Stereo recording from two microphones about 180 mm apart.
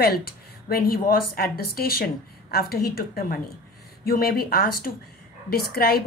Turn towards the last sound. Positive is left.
turn(degrees=60)  # may be behind; listen again after turning